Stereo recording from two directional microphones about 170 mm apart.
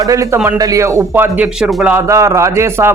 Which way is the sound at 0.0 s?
20° right (ahead or behind).